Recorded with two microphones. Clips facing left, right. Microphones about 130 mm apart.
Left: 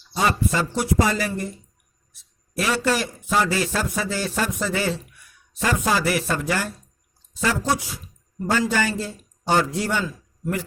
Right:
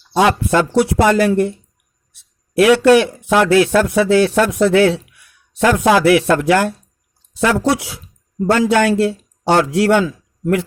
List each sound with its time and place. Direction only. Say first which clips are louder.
0.1 s a man's voice: right 8 dB; 75° right (ahead or behind)